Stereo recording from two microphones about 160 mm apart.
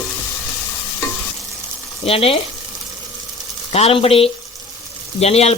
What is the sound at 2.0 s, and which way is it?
Speech, 35° left (ahead or behind).